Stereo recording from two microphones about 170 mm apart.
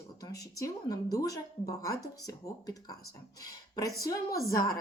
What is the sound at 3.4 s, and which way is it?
Speech, 20° left (ahead or behind).